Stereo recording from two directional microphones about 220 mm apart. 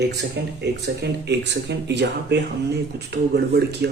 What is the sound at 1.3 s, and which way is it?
A man's voice, 50° right (ahead or behind).